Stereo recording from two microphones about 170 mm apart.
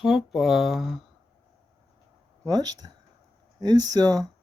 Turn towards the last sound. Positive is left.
turn(degrees=-20)  # may be behind; listen again after turning